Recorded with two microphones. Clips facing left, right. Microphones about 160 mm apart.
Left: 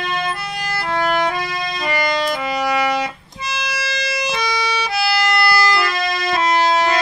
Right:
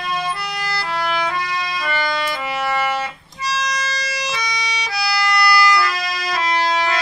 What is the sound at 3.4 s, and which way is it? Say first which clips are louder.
Music: right 2 dB; 60° left (ahead or behind).